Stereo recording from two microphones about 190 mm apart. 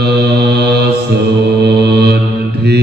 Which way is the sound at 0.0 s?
60° right (ahead or behind).